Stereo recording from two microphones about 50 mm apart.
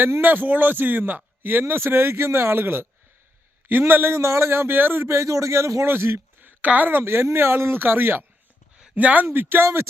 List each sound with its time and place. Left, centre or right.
0.2 s a man's voice: right
4.4 s a man's voice: right
5.0 s a man's voice: right
5.8 s a man's voice: right
6.6 s a woman's voice: right
7.0 s a man's voice: right
9.0 s speech: right
9.2 s a man's voice: right